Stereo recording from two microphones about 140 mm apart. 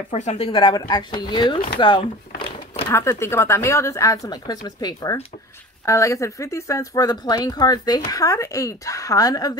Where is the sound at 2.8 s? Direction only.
20° left (ahead or behind).